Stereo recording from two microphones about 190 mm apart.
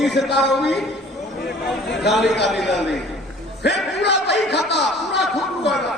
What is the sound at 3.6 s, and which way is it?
Speech, 60° left (ahead or behind).